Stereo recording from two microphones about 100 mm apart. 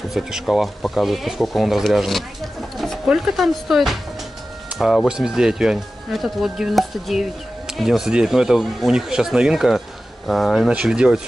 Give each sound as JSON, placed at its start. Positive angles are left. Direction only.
{"t": 0.1, "sound": "speech", "side_deg": 0}
{"t": 10.7, "sound": "speech", "side_deg": -10}